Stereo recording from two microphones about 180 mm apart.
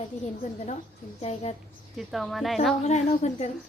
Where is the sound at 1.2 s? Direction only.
35° left (ahead or behind).